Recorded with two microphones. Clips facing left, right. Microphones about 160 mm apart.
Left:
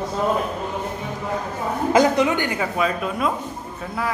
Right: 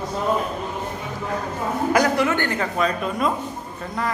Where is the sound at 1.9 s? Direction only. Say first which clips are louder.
Left 3 dB; 20° left (ahead or behind); by 3.3 s 5° left (ahead or behind).